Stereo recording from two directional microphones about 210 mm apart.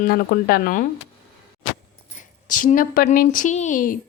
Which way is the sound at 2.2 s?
40° left (ahead or behind).